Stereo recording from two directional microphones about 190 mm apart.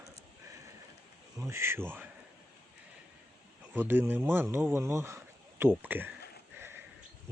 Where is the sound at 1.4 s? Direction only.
15° right (ahead or behind).